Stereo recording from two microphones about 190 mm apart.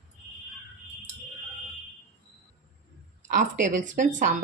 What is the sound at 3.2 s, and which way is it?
Speech, 40° right (ahead or behind).